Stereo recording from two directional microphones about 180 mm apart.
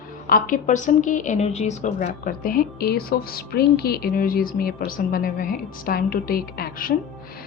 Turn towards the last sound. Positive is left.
turn(degrees=55)  # may be behind; listen again after turning